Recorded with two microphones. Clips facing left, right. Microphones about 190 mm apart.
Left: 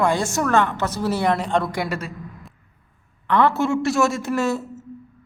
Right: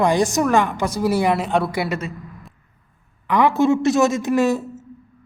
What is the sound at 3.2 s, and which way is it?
A woman's voice, 10° right (ahead or behind).